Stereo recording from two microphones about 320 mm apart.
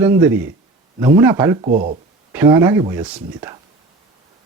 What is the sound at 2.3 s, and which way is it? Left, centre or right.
Speech, centre.